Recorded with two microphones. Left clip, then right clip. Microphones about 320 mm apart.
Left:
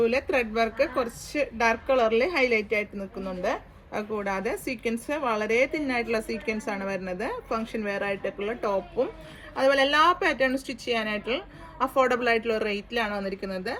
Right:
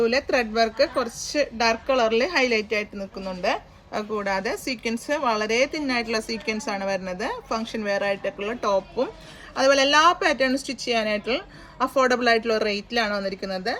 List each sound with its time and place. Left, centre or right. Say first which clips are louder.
0.0 s a woman's voice: right 2 dB; right